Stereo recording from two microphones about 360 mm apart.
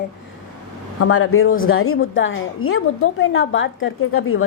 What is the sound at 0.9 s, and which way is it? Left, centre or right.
A woman's voice, left.